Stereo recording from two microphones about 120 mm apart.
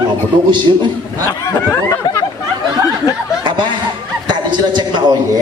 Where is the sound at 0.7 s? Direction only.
40° right (ahead or behind).